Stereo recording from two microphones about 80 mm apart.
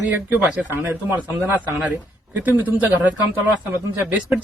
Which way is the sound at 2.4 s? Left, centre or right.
Right.